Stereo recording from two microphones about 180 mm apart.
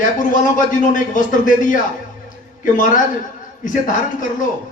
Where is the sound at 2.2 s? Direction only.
45° left (ahead or behind).